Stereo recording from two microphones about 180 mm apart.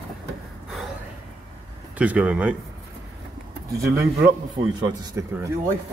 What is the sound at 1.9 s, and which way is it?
Speech, 5° right (ahead or behind).